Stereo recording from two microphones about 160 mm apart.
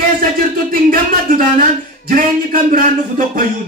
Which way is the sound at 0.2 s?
60° right (ahead or behind).